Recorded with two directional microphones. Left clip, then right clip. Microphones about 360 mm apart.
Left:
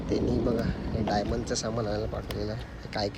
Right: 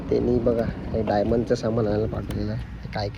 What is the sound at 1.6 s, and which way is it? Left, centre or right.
Speech, right.